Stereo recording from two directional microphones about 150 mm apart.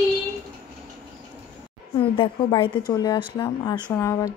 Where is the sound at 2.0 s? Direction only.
35° left (ahead or behind).